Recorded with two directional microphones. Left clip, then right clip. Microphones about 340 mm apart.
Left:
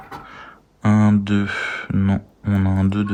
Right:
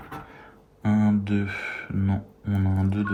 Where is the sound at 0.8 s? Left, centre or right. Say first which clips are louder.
Left 6 dB; left.